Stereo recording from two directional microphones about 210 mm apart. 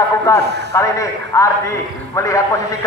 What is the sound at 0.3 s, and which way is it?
A man's voice, 15° left (ahead or behind).